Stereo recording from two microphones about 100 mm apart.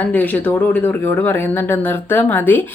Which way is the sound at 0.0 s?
15° left (ahead or behind).